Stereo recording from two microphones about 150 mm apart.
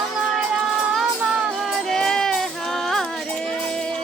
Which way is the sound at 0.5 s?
5° right (ahead or behind).